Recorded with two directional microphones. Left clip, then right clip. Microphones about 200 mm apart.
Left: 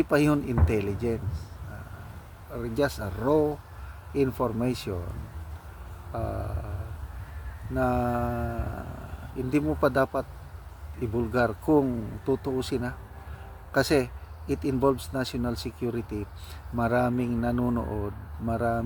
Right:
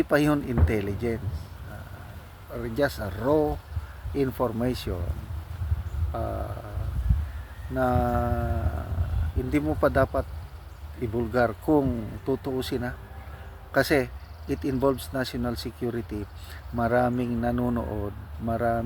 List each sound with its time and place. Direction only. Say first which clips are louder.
0.1 s speech: right 1 dB; 10° left (ahead or behind)
2.7 s speech: right 1 dB; 5° left (ahead or behind)
6.1 s speech: right 2 dB; 5° left (ahead or behind)
7.8 s speech: right 2 dB; 5° left (ahead or behind)